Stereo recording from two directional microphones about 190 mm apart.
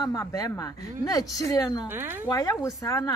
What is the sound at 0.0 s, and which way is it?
Speech, 20° left (ahead or behind).